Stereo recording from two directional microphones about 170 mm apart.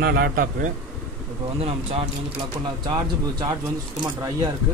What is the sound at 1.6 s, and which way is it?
Speech, 35° right (ahead or behind).